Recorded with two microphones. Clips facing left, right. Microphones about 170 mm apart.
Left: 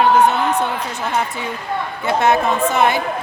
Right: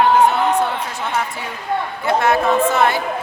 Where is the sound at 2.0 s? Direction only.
20° left (ahead or behind).